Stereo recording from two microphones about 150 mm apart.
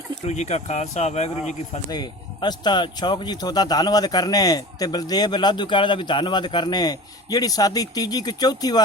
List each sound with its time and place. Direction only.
0.3 s speech: 50° left (ahead or behind)
1.9 s a man's voice: 25° left (ahead or behind)